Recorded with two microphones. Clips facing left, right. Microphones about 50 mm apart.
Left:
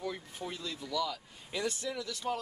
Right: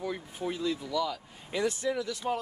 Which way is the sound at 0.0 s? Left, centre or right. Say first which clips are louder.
Right 5 dB; centre.